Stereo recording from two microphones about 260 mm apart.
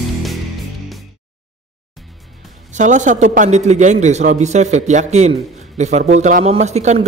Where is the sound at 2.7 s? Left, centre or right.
Right.